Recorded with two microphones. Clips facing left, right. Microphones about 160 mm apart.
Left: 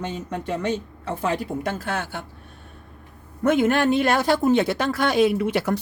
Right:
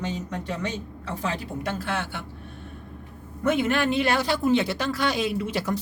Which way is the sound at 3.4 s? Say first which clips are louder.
Left 4 dB; 45° left (ahead or behind).